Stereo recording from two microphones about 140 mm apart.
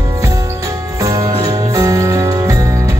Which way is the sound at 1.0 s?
25° right (ahead or behind).